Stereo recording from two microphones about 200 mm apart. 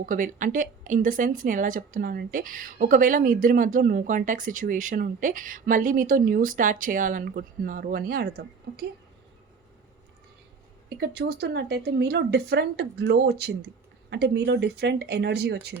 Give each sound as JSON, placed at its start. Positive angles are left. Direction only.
{"t": 0.0, "sound": "speech", "side_deg": -40}
{"t": 10.8, "sound": "speech", "side_deg": -55}